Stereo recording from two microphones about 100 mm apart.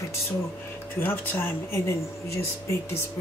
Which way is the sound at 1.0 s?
20° left (ahead or behind).